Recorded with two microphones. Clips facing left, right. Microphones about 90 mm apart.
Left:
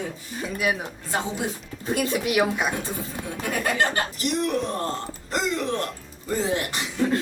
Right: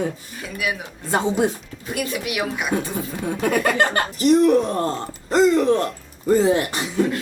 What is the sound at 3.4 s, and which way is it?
Speech, 55° right (ahead or behind).